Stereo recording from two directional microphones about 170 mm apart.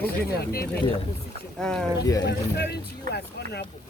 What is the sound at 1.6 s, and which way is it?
Speech, 5° left (ahead or behind).